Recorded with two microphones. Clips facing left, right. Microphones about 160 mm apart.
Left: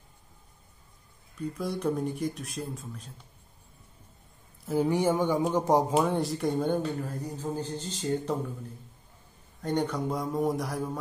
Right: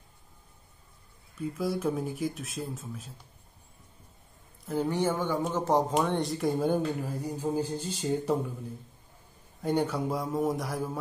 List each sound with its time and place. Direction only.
1.4 s speech: centre (ahead or behind)
4.6 s speech: 10° left (ahead or behind); by 8.5 s 10° right (ahead or behind)
9.6 s speech: 10° right (ahead or behind)